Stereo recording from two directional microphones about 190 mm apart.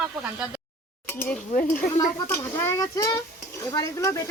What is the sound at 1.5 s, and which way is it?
Speech, 45° left (ahead or behind).